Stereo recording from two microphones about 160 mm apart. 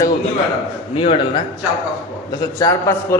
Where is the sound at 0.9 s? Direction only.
35° left (ahead or behind).